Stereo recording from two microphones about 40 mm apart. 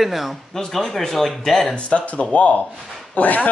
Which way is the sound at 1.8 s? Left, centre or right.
Left.